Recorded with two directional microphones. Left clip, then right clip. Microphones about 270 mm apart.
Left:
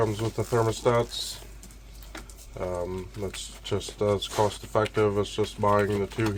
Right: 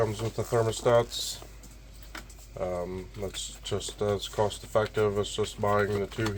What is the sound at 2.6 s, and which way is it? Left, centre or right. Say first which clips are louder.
Speech: left 1 dB; left.